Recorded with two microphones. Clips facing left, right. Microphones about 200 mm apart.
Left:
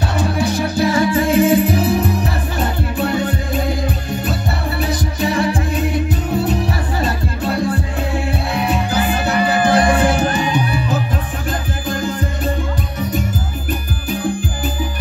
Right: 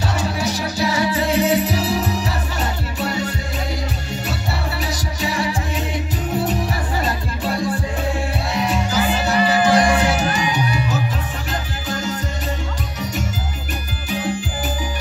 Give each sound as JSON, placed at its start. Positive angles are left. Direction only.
{"t": 0.2, "sound": "music", "side_deg": 55}
{"t": 4.8, "sound": "music", "side_deg": 55}
{"t": 8.6, "sound": "music", "side_deg": 55}